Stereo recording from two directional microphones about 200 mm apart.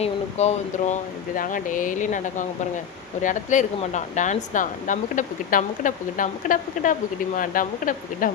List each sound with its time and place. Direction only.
0.0 s speech: 35° left (ahead or behind)